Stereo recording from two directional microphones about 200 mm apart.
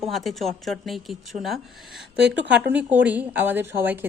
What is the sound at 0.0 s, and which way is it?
Speech, centre (ahead or behind).